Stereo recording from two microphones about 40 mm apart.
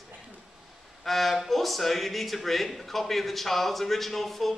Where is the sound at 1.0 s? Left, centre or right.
Centre.